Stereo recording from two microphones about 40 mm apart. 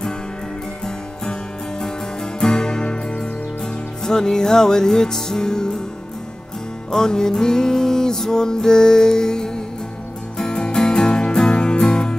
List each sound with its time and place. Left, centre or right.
2.4 s music: centre
6.9 s music: centre